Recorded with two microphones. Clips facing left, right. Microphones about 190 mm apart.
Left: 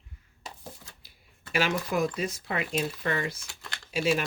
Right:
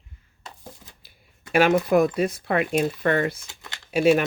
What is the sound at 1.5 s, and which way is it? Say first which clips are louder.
Speech: right 9 dB; 55° right (ahead or behind).